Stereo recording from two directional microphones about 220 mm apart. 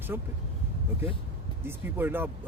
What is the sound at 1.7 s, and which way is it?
Speech, 10° right (ahead or behind).